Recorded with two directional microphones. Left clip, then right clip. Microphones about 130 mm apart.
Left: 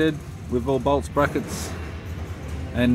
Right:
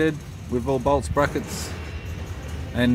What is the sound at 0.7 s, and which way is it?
Speech, 15° right (ahead or behind).